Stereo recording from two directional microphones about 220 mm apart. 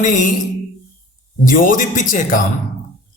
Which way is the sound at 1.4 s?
35° left (ahead or behind).